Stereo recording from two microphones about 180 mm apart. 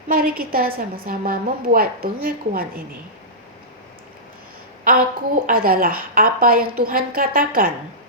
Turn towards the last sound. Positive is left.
turn(degrees=-50)  # may be behind; listen again after turning